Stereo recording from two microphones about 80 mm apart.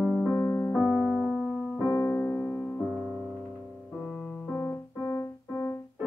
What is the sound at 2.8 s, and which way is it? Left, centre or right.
Music, centre.